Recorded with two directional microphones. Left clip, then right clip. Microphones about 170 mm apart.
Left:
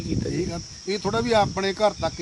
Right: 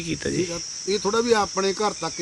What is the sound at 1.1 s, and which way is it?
Speech, 40° left (ahead or behind).